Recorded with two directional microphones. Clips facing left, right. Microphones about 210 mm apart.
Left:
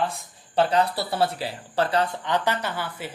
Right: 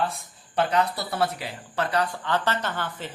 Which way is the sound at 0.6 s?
30° left (ahead or behind).